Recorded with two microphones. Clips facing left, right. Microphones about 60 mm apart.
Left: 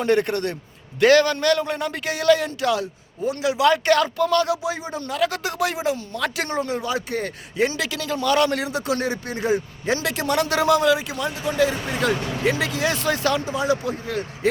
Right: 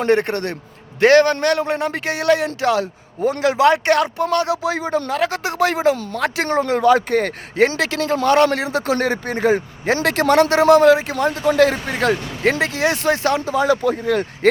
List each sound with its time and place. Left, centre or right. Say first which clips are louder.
0.0 s a man's voice: right 3 dB; right
3.2 s a man's voice: right 5 dB; right
5.2 s a man's voice: even; right
6.6 s speech: right 12 dB; right
7.7 s a man's voice: right 6 dB; right
10.5 s a man's voice: right 5 dB; right
13.5 s a man's voice: right 6 dB; right
13.9 s speech: right 8 dB; right